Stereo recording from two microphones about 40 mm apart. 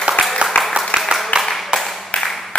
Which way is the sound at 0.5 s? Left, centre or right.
Left.